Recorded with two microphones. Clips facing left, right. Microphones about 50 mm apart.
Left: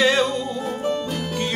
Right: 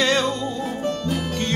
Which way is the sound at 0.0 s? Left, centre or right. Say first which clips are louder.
Left 2 dB; centre.